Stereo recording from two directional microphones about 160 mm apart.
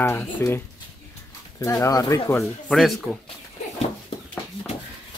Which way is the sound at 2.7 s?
Centre (ahead or behind).